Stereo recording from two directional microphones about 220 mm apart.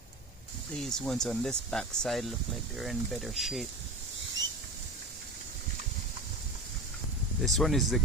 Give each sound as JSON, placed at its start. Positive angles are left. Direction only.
{"t": 0.8, "sound": "speech", "side_deg": 0}
{"t": 7.4, "sound": "speech", "side_deg": 0}